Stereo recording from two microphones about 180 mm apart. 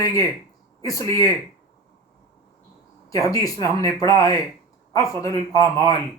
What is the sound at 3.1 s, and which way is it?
A man's voice, 20° left (ahead or behind).